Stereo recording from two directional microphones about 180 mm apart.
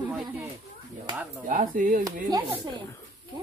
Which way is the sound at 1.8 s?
50° right (ahead or behind).